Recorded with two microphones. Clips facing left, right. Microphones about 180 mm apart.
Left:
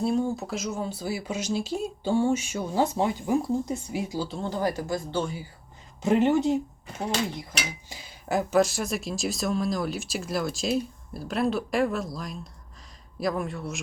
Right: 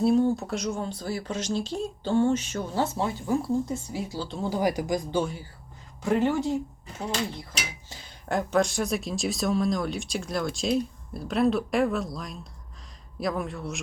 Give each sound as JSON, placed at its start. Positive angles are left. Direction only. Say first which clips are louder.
{"t": 0.0, "sound": "speech", "louder": "right 4 dB", "side_deg": 0}
{"t": 4.3, "sound": "speech", "louder": "right 2 dB", "side_deg": -5}
{"t": 6.0, "sound": "speech", "louder": "left 3 dB", "side_deg": 20}
{"t": 7.9, "sound": "speech", "louder": "right 1 dB", "side_deg": 10}